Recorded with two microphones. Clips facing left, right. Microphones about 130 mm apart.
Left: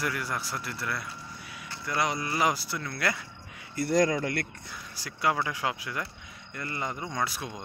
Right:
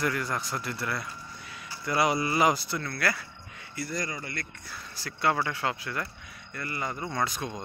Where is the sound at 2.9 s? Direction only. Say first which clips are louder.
Left 1 dB; 20° left (ahead or behind).